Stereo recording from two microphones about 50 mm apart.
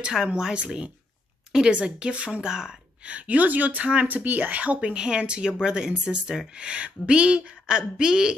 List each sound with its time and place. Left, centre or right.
0.4 s speech: centre
3.2 s speech: right